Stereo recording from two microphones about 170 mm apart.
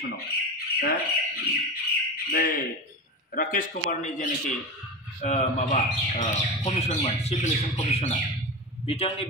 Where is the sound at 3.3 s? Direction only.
55° left (ahead or behind).